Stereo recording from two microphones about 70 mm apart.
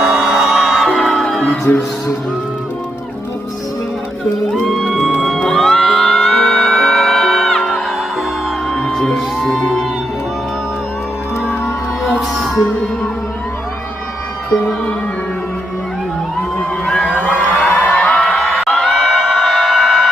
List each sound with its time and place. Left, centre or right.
0.0 s music: centre
4.7 s music: centre
8.7 s music: centre
11.4 s music: centre
16.8 s a sound: centre
18.2 s crowd: centre